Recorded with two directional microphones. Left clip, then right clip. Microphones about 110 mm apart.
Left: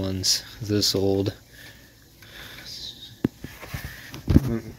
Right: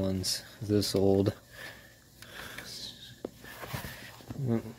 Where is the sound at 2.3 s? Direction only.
40° right (ahead or behind).